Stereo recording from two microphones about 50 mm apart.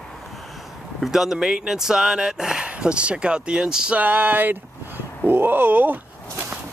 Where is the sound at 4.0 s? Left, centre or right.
Right.